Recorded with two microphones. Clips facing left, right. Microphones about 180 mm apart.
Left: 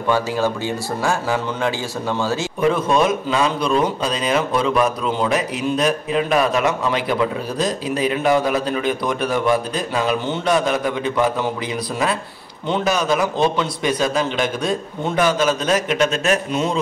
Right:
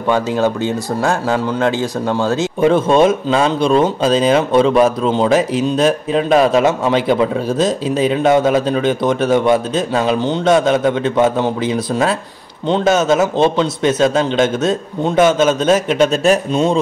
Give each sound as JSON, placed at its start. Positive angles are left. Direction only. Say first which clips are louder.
{"t": 1.8, "sound": "speech", "louder": "right 6 dB", "side_deg": -15}
{"t": 2.6, "sound": "speech", "louder": "right 6 dB", "side_deg": -30}